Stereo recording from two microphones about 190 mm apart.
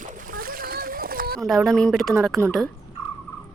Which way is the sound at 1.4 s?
Centre (ahead or behind).